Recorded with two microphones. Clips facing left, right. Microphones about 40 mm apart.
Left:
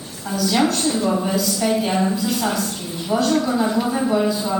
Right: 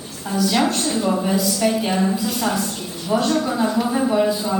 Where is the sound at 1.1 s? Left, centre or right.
Centre.